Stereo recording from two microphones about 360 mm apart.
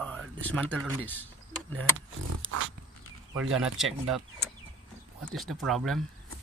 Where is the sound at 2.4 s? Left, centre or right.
Right.